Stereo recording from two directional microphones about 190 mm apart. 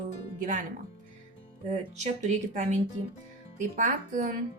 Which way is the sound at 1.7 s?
40° right (ahead or behind).